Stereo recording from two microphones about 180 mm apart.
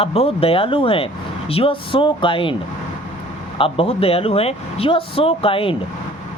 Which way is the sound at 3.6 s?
30° left (ahead or behind).